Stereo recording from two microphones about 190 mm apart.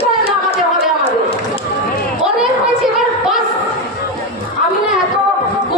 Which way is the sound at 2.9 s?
5° right (ahead or behind).